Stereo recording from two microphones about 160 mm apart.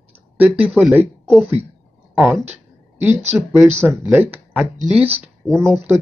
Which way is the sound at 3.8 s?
15° right (ahead or behind).